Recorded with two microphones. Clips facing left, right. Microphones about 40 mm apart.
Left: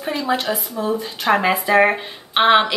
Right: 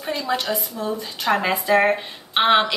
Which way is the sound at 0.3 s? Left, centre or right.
Centre.